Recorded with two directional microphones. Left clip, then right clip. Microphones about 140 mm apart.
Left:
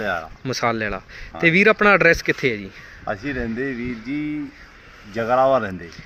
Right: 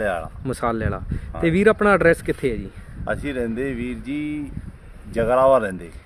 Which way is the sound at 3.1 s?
70° right (ahead or behind).